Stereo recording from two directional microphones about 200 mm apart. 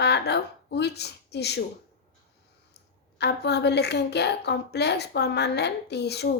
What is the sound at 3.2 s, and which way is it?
A woman's voice, 55° left (ahead or behind).